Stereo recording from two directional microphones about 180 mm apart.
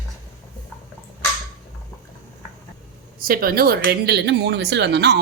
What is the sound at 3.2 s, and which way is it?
Speech, 55° right (ahead or behind).